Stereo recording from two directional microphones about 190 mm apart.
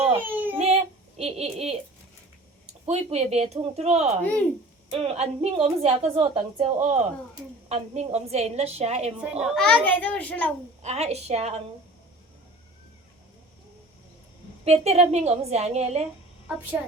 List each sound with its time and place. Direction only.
0.2 s a sound: 10° right (ahead or behind)
0.6 s a sound: 35° right (ahead or behind)
2.8 s a woman's voice: 35° right (ahead or behind)
4.2 s a child's voice: 5° left (ahead or behind)
4.9 s a woman's voice: 35° right (ahead or behind)
9.2 s a child's voice: 5° right (ahead or behind)
10.8 s a woman's voice: 35° right (ahead or behind)
14.6 s a woman's voice: 35° right (ahead or behind)